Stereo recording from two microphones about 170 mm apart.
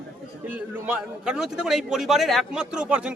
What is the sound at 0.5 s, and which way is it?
A man's voice, 5° right (ahead or behind).